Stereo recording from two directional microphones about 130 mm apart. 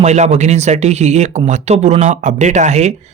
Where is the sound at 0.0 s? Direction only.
60° right (ahead or behind).